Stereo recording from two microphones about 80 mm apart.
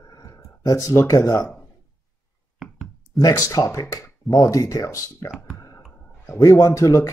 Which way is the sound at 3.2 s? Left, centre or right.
Left.